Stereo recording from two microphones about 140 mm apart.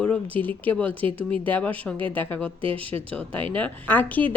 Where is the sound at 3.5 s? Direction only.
10° left (ahead or behind).